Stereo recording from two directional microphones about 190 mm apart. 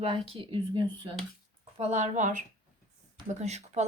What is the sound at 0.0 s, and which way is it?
Speech, 30° right (ahead or behind).